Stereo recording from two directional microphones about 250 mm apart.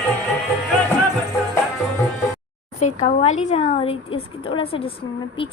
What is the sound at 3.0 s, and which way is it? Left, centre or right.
A woman's voice, left.